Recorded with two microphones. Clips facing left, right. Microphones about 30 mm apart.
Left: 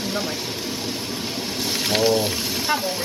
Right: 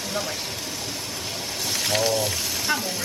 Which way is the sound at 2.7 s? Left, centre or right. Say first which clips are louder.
Left 3 dB; centre.